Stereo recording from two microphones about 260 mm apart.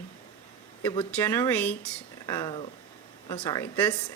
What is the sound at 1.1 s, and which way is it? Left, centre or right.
A woman's voice, centre.